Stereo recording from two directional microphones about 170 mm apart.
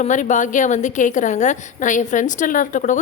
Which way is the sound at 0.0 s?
45° left (ahead or behind).